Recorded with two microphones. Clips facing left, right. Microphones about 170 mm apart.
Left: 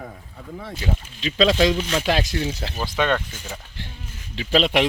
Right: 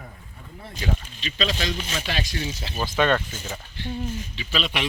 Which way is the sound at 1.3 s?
90° left.